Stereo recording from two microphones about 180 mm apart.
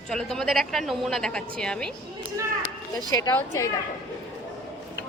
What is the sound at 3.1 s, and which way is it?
Speech, 20° left (ahead or behind).